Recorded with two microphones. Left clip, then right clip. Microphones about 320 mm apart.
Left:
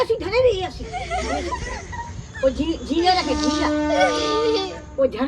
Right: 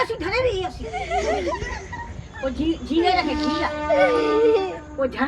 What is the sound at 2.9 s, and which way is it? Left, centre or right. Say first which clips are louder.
Speech: left 2 dB; left.